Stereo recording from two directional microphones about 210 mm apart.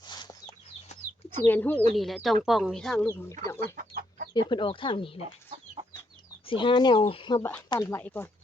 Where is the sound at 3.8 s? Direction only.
45° right (ahead or behind).